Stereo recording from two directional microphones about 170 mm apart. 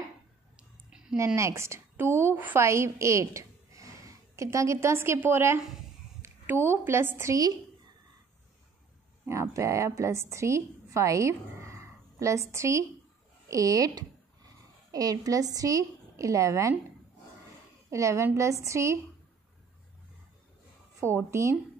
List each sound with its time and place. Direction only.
0.6 s a sound: 5° right (ahead or behind)
1.1 s a woman's voice: 20° right (ahead or behind)
9.2 s a woman's voice: 15° right (ahead or behind)
17.8 s a woman's voice: 15° right (ahead or behind)
21.0 s a woman's voice: 15° right (ahead or behind)